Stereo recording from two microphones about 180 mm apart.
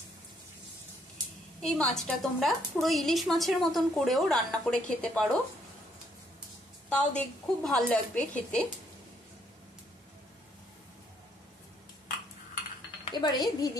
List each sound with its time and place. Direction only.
1.6 s a woman's voice: 5° left (ahead or behind)
6.9 s a woman's voice: 5° left (ahead or behind)
13.1 s speech: 25° left (ahead or behind)